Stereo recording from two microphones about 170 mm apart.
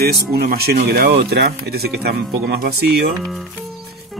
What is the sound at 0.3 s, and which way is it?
Speech, 65° right (ahead or behind).